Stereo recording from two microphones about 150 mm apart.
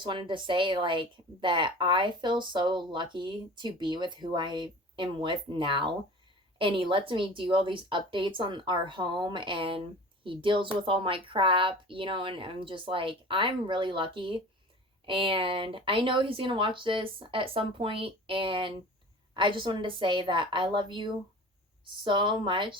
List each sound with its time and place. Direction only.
0.0 s a woman's voice: 35° right (ahead or behind)